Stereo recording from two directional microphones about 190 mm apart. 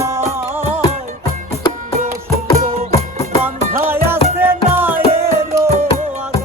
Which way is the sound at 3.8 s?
10° right (ahead or behind).